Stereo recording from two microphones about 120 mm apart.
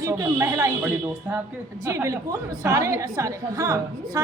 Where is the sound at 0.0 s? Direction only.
25° right (ahead or behind).